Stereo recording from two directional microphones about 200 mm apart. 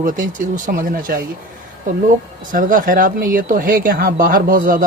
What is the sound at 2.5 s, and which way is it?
Speech, 40° right (ahead or behind).